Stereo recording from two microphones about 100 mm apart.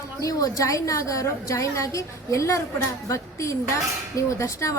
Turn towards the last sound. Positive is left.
turn(degrees=30)  # may be behind; listen again after turning